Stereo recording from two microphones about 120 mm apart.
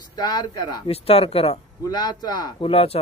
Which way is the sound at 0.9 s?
55° left (ahead or behind).